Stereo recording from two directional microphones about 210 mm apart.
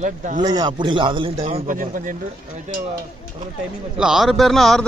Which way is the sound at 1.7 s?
40° right (ahead or behind).